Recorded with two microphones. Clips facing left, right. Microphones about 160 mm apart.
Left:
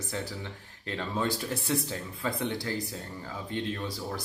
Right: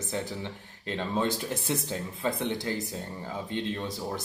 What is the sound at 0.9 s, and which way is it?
Speech, 20° right (ahead or behind).